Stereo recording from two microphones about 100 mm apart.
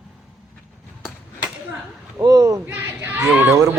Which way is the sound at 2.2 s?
40° right (ahead or behind).